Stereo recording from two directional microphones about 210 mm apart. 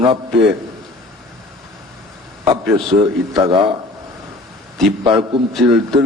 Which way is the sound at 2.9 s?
35° right (ahead or behind).